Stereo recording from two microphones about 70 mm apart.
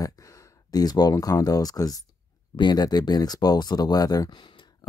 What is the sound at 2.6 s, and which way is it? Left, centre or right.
Speech, left.